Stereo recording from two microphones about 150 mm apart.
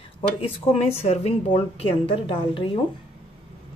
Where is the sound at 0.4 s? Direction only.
40° left (ahead or behind).